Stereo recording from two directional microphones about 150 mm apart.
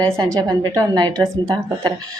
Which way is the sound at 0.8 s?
25° right (ahead or behind).